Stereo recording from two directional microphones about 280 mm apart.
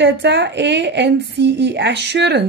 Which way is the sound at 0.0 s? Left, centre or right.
Right.